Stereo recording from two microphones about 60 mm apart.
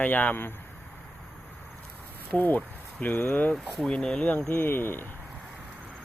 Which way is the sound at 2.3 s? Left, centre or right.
Left.